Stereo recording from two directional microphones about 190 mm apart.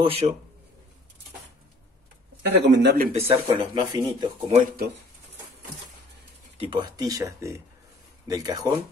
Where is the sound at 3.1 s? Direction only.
30° right (ahead or behind).